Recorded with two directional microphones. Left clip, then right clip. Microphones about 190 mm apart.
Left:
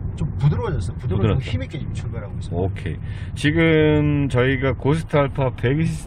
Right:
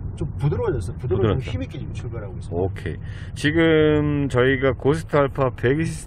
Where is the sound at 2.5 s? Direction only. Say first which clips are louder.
Right 1 dB; 20° right (ahead or behind).